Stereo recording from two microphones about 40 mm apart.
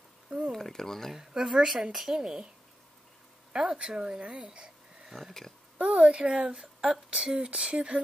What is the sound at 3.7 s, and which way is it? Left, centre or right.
Speech, right.